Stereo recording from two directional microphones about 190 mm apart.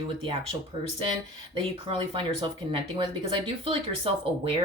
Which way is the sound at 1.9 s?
30° right (ahead or behind).